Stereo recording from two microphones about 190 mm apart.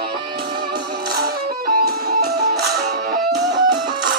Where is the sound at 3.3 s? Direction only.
20° right (ahead or behind).